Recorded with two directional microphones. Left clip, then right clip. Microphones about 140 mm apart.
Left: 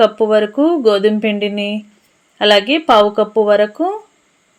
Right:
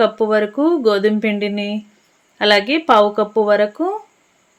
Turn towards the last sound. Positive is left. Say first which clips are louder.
# left 3 dB
turn(degrees=10)  # may be behind; listen again after turning